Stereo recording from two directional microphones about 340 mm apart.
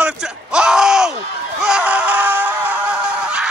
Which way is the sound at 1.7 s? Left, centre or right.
Centre.